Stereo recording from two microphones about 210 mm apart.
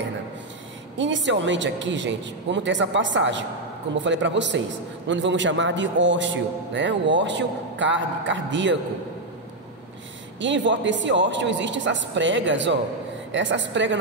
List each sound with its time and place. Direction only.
0.9 s a man's voice: 60° right (ahead or behind)
10.4 s a man's voice: 60° right (ahead or behind)